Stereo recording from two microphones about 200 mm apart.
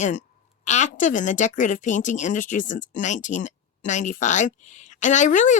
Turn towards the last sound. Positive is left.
turn(degrees=40)  # may be behind; listen again after turning